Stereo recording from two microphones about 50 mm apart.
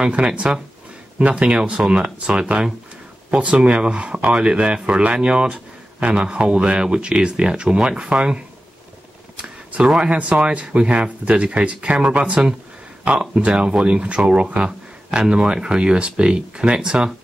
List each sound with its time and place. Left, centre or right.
0.0 s speech: right
9.8 s speech: centre